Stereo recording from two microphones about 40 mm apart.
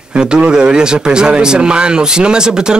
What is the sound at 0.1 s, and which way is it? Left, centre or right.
Speech, right.